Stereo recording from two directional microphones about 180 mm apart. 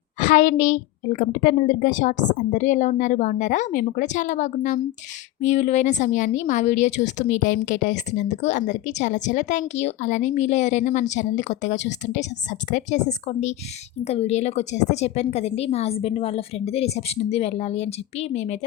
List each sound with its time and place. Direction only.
0.2 s a woman's voice: 45° left (ahead or behind)